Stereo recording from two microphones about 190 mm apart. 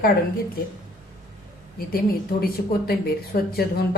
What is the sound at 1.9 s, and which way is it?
Speech, 50° left (ahead or behind).